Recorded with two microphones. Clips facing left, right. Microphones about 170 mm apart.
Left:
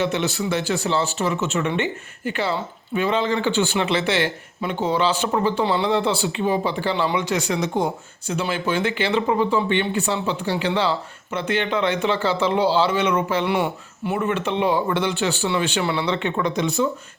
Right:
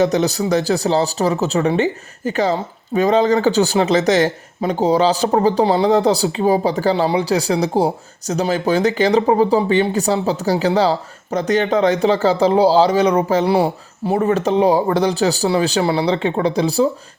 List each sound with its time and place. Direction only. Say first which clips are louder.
0.0 s speech: right 6 dB; 40° right (ahead or behind)